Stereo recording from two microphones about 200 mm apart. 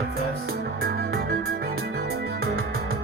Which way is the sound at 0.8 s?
55° right (ahead or behind).